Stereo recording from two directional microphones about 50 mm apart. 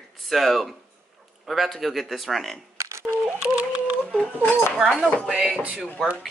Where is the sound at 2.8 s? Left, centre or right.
Right.